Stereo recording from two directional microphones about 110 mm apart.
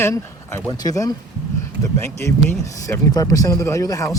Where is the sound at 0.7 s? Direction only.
35° left (ahead or behind).